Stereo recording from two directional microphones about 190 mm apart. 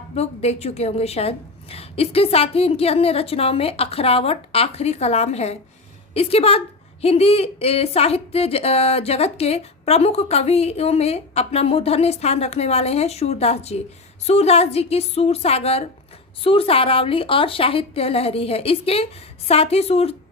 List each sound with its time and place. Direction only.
0.1 s a woman's voice: 35° left (ahead or behind)